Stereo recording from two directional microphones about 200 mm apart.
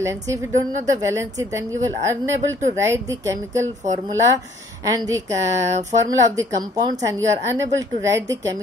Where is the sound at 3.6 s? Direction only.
40° right (ahead or behind).